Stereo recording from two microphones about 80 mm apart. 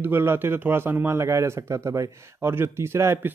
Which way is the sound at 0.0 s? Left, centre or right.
Right.